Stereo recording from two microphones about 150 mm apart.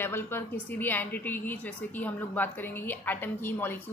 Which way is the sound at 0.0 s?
15° left (ahead or behind).